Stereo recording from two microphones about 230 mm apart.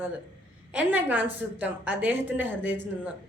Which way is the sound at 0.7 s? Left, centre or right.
Centre.